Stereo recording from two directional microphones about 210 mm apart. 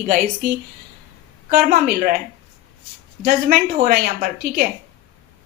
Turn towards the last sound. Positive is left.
turn(degrees=-45)  # may be behind; listen again after turning